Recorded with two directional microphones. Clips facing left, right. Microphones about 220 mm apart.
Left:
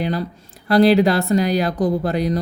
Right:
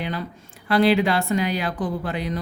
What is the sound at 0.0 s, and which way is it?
Speech, 35° left (ahead or behind).